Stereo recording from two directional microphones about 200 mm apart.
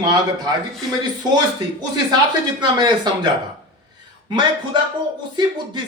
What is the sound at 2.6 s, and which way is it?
Speech, 20° right (ahead or behind).